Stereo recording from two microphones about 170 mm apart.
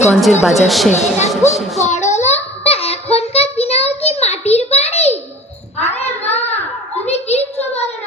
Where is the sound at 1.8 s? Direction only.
45° left (ahead or behind).